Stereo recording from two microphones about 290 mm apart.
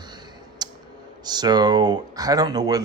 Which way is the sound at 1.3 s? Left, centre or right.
Centre.